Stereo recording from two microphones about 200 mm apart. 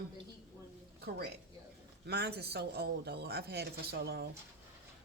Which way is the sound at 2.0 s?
55° right (ahead or behind).